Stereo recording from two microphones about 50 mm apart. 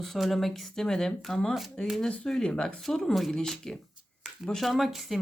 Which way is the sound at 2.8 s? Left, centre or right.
Centre.